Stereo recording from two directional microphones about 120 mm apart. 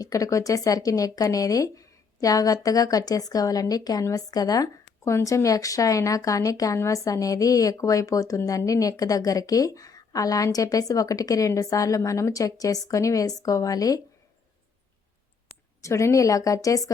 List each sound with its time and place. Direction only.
0.0 s speech: 30° left (ahead or behind)
15.8 s speech: 25° left (ahead or behind)